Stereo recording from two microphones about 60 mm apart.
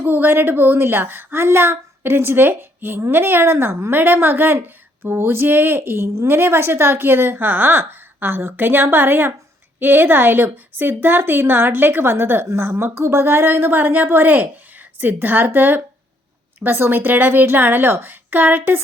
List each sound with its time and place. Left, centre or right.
0.0 s a woman's voice: right
4.0 s a woman's voice: right